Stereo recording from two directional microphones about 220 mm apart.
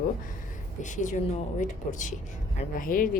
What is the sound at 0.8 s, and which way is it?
A woman's voice, 35° left (ahead or behind).